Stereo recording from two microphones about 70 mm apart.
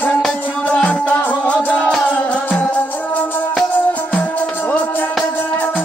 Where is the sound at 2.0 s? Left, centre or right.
Left.